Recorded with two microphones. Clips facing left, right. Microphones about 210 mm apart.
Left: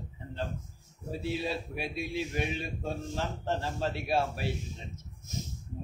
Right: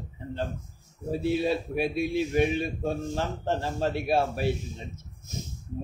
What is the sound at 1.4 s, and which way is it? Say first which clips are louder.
Speech: right 8 dB; 55° right (ahead or behind).